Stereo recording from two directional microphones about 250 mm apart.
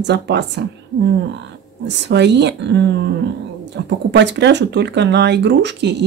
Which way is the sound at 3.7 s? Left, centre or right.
Right.